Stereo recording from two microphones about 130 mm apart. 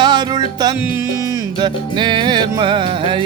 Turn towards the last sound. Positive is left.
turn(degrees=-40)  # may be behind; listen again after turning